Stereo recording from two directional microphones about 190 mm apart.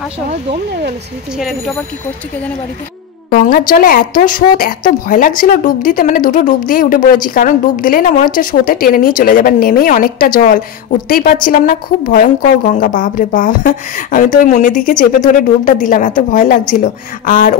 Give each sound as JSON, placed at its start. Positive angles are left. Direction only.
{"t": 1.4, "sound": "speech", "side_deg": 0}
{"t": 3.3, "sound": "speech", "side_deg": 50}